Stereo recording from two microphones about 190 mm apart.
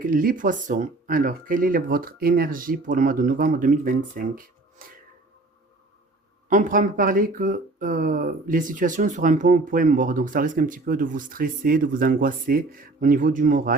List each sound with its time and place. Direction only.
0.0 s speech: 50° right (ahead or behind)
6.5 s speech: 45° right (ahead or behind)